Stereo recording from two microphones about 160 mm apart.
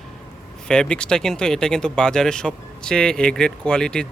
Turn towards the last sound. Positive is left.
turn(degrees=5)  # may be behind; listen again after turning